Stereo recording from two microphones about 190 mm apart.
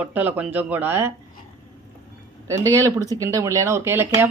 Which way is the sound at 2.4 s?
15° right (ahead or behind).